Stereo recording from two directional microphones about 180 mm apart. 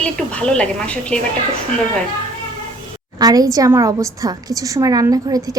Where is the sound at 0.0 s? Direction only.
5° left (ahead or behind).